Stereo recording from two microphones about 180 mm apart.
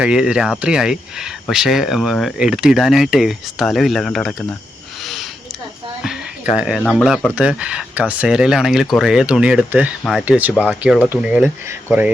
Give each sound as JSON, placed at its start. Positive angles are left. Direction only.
{"t": 0.0, "sound": "speech", "side_deg": -5}
{"t": 5.0, "sound": "a sound", "side_deg": 0}
{"t": 6.6, "sound": "speech", "side_deg": -5}